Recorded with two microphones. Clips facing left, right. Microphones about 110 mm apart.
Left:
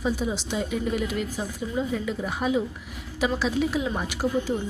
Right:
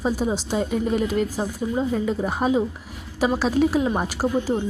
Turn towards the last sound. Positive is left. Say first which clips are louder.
# right 3 dB
turn(degrees=-40)  # may be behind; listen again after turning